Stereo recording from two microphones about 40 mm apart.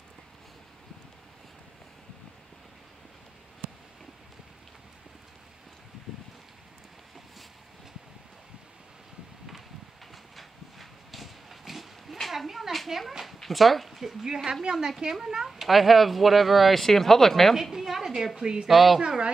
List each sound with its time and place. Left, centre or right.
10.3 s a sound: centre
13.4 s speech: centre
14.2 s a woman's voice: centre
17.6 s a woman's voice: centre
18.7 s speech: centre
18.9 s speech: right